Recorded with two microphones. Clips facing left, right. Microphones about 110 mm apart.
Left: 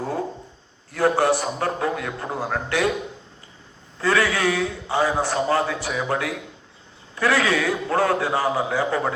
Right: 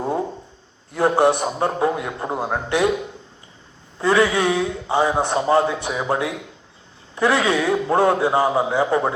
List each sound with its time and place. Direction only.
0.9 s a man's voice: 25° right (ahead or behind)
3.9 s a man's voice: 20° right (ahead or behind)